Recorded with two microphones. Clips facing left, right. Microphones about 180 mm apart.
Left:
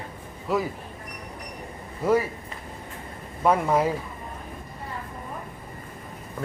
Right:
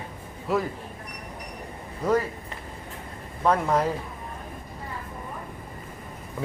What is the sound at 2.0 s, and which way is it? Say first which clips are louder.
Speech: left 2 dB; 10° left (ahead or behind).